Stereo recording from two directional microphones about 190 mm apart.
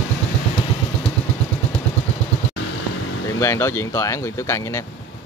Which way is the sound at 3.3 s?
15° left (ahead or behind).